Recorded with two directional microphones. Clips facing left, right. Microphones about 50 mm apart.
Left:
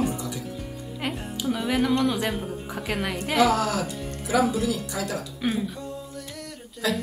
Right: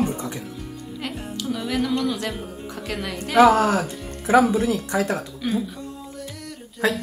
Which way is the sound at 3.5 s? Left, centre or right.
Right.